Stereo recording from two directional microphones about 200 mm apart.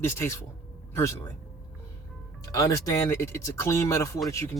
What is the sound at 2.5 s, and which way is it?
Speech, 15° left (ahead or behind).